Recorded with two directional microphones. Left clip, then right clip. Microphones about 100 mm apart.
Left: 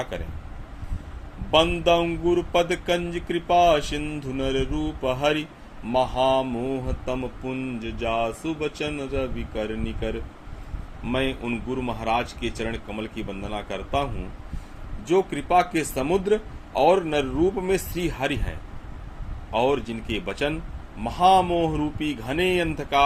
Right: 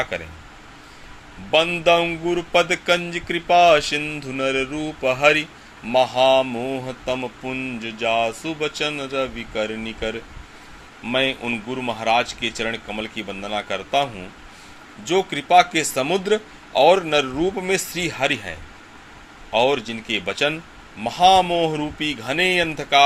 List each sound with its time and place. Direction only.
1.5 s speech: 15° right (ahead or behind)